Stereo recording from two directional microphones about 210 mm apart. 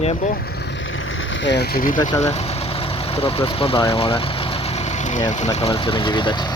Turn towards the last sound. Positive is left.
turn(degrees=20)  # may be behind; listen again after turning